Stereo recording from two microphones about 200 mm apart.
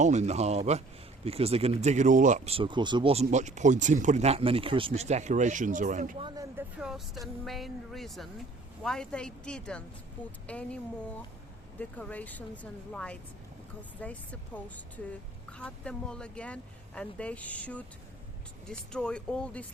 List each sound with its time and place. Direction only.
0.0 s speech: 35° right (ahead or behind)
6.2 s speech: 15° right (ahead or behind)
6.7 s vehicle: 5° right (ahead or behind)
7.4 s a woman's voice: centre (ahead or behind)
11.8 s a woman's voice: 5° left (ahead or behind)